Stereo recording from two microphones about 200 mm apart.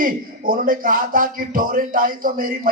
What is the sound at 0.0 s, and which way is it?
Speech, 45° right (ahead or behind).